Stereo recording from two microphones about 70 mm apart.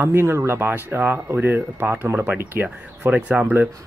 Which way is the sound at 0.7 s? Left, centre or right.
Right.